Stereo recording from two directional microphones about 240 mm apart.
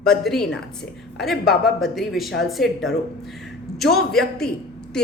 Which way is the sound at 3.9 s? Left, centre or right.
Centre.